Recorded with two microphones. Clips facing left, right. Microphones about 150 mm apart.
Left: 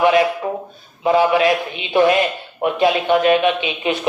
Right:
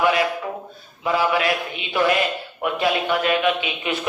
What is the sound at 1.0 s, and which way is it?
A man's voice, 25° left (ahead or behind).